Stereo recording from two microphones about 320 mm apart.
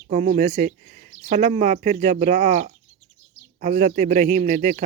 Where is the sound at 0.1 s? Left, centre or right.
Right.